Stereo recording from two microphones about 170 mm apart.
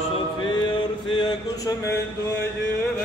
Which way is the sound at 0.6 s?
25° left (ahead or behind).